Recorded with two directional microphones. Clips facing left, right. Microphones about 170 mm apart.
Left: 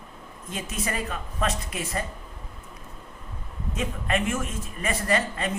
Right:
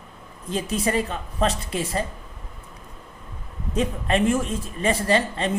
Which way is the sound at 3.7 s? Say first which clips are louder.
Right 5 dB; 30° right (ahead or behind).